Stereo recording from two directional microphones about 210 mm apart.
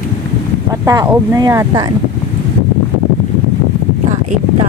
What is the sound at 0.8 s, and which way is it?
Speech, 15° right (ahead or behind).